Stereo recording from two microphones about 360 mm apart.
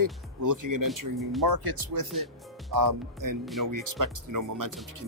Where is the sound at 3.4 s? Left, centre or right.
Centre.